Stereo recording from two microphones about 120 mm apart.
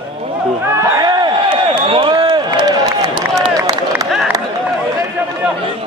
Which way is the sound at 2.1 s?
35° right (ahead or behind).